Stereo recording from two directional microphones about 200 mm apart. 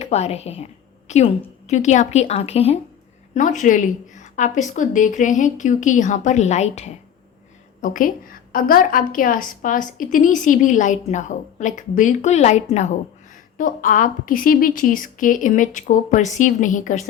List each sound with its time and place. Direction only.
0.0 s a woman's voice: 30° left (ahead or behind)